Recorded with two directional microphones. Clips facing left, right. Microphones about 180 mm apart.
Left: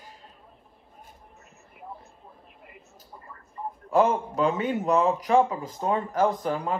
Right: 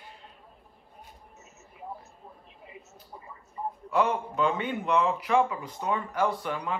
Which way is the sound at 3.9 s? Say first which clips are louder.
Left 5 dB; 45° left (ahead or behind).